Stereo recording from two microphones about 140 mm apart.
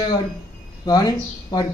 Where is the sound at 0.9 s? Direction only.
25° left (ahead or behind).